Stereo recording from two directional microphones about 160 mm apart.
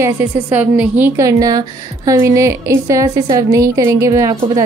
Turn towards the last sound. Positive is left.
turn(degrees=-20)  # may be behind; listen again after turning